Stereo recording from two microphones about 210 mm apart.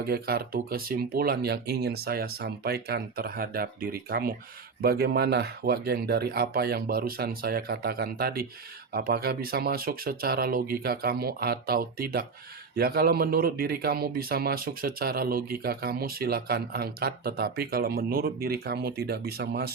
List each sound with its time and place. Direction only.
0.1 s speech: 45° right (ahead or behind)